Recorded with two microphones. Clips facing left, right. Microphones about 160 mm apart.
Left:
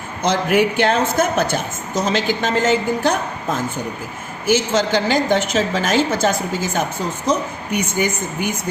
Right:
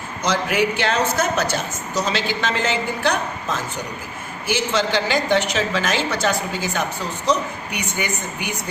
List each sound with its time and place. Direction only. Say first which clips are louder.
0.2 s a woman's voice: left 4 dB; 50° left (ahead or behind)